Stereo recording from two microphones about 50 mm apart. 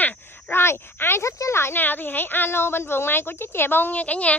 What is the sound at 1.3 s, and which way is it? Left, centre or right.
Speech, left.